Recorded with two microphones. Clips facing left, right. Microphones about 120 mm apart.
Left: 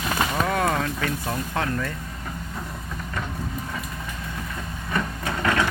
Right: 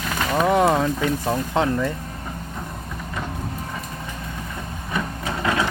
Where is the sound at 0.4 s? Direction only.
20° right (ahead or behind).